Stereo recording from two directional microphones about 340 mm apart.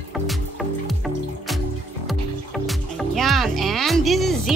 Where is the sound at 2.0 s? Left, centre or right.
Centre.